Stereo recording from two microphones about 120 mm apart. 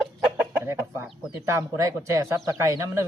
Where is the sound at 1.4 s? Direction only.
25° right (ahead or behind).